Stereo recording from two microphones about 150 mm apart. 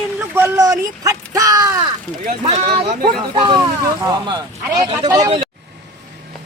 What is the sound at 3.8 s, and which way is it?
Speech, 20° right (ahead or behind).